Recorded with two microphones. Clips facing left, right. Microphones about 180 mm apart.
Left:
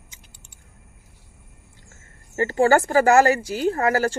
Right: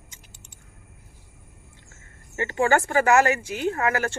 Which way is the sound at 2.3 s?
35° left (ahead or behind).